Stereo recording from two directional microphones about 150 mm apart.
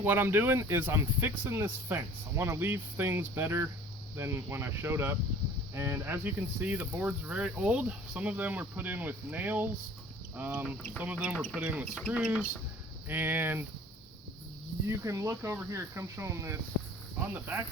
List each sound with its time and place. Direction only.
0.0 s speech: 15° right (ahead or behind)
14.8 s speech: 20° right (ahead or behind)